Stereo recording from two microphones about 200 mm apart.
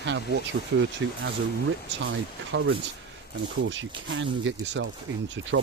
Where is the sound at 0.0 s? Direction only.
60° right (ahead or behind).